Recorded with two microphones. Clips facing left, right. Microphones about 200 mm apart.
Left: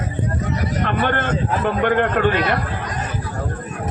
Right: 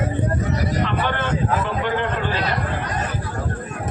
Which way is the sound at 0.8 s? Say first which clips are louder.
Left 2 dB; 55° left (ahead or behind).